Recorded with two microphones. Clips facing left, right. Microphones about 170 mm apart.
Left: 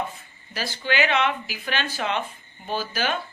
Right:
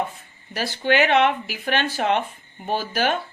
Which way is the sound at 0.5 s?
65° right (ahead or behind).